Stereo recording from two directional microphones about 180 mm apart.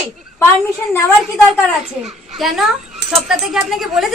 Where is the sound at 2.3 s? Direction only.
Centre (ahead or behind).